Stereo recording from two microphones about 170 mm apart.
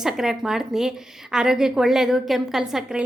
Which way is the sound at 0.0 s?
Centre (ahead or behind).